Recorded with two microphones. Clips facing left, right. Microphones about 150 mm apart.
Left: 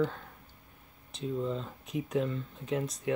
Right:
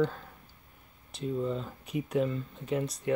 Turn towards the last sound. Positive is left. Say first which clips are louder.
# right 1 dB
turn(degrees=0)  # may be behind; listen again after turning